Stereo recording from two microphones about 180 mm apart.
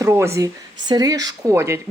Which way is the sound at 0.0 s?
15° right (ahead or behind).